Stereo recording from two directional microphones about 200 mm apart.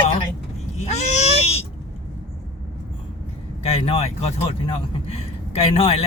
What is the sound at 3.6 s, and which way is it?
A man's voice, 30° left (ahead or behind).